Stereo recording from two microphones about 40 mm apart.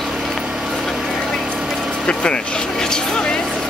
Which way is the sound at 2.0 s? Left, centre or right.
Left.